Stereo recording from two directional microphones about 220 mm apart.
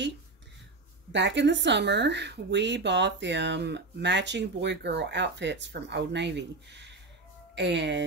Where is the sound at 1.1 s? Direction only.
55° right (ahead or behind).